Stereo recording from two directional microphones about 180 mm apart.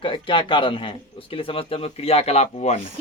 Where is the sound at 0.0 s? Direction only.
30° left (ahead or behind).